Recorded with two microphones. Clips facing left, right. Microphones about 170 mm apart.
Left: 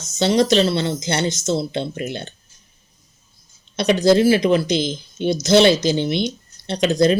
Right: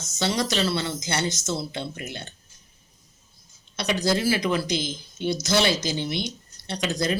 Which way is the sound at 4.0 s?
25° left (ahead or behind).